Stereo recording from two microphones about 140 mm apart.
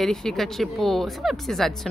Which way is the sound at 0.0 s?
5° left (ahead or behind).